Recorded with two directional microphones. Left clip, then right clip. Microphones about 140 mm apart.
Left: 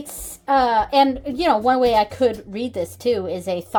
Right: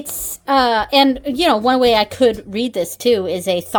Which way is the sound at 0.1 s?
40° right (ahead or behind).